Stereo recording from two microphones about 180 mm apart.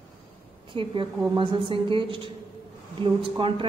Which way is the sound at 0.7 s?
25° right (ahead or behind).